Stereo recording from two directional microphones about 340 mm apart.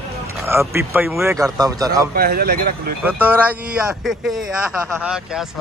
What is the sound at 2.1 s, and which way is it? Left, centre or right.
Speech, right.